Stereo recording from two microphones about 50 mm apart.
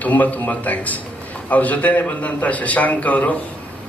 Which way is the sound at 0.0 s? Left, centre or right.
Left.